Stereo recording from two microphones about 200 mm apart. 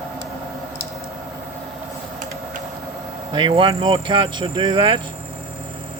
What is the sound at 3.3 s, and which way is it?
Speech, 25° right (ahead or behind).